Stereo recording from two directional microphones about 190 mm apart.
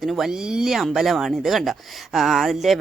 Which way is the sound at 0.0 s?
Centre (ahead or behind).